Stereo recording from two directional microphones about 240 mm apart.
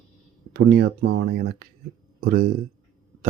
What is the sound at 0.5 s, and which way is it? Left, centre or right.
Speech, right.